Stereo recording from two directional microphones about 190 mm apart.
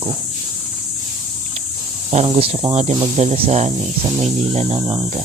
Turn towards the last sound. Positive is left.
turn(degrees=-30)  # may be behind; listen again after turning